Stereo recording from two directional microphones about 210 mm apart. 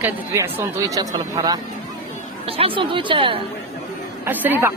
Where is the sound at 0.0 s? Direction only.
15° right (ahead or behind).